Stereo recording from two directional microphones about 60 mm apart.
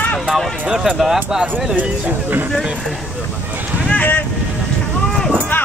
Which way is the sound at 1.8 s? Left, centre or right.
Right.